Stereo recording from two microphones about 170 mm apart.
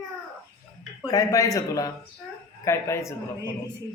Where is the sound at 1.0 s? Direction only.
20° left (ahead or behind).